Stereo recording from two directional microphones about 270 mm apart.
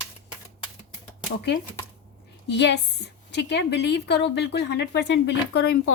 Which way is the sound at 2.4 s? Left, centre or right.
Left.